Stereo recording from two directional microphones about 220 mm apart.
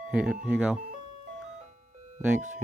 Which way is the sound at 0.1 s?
5° right (ahead or behind).